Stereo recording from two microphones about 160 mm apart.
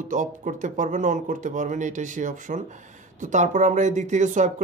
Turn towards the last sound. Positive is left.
turn(degrees=-50)  # may be behind; listen again after turning